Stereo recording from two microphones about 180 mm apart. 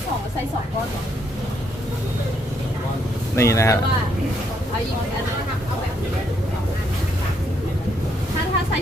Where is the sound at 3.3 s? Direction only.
15° left (ahead or behind).